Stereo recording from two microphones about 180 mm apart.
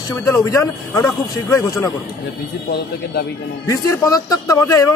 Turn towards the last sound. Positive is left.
turn(degrees=20)  # may be behind; listen again after turning